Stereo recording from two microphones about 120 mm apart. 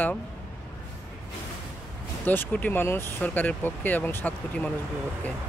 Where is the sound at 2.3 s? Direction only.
15° left (ahead or behind).